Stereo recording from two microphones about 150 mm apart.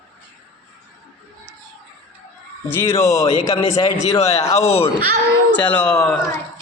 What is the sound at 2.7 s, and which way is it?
Speech, 15° left (ahead or behind).